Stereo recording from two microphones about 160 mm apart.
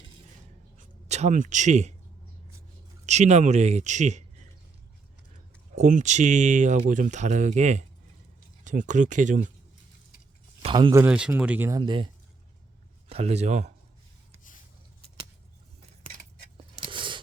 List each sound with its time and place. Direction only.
1.0 s speech: 45° right (ahead or behind)
3.1 s speech: 45° right (ahead or behind)
5.7 s speech: 50° right (ahead or behind)
10.9 s speech: 10° right (ahead or behind)
11.7 s speech: 30° right (ahead or behind)
13.1 s speech: 40° right (ahead or behind)
16.6 s a sound: 30° right (ahead or behind)